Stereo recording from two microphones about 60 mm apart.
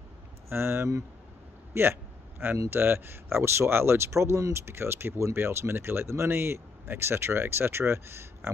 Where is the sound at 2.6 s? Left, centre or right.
Right.